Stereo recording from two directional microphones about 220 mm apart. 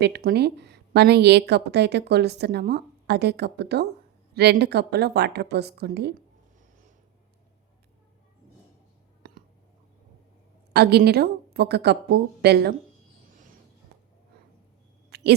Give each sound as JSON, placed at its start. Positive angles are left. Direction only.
{"t": 0.0, "sound": "a woman's voice", "side_deg": -50}
{"t": 10.7, "sound": "a woman's voice", "side_deg": -50}
{"t": 15.1, "sound": "a sound", "side_deg": -45}